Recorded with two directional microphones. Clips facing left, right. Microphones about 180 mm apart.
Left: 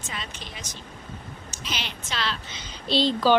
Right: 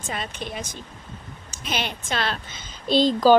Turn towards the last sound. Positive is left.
turn(degrees=-45)  # may be behind; listen again after turning